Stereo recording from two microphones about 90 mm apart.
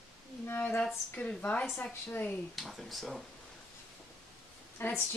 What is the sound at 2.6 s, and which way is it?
Speech, centre (ahead or behind).